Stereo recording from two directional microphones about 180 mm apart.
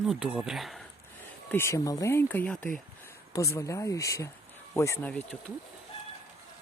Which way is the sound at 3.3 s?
15° left (ahead or behind).